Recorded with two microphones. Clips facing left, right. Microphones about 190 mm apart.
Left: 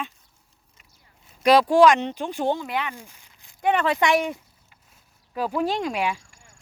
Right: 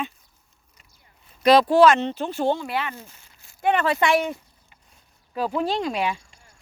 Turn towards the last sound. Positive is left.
turn(degrees=10)  # may be behind; listen again after turning